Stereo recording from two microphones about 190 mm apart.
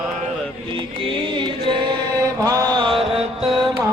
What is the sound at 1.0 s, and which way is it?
Music, 25° right (ahead or behind).